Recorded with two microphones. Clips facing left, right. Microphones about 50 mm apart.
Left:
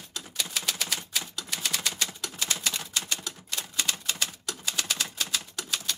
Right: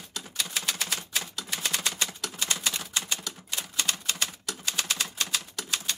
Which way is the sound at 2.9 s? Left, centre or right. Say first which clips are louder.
Right 1 dB; centre.